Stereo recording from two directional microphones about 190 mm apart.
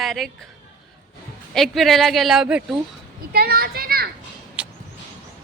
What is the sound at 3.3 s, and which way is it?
Speech, 55° right (ahead or behind).